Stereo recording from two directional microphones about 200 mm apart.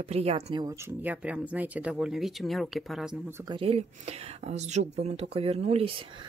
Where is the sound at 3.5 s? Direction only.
30° right (ahead or behind).